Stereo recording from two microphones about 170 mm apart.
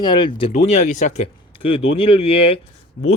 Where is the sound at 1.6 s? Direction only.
35° left (ahead or behind).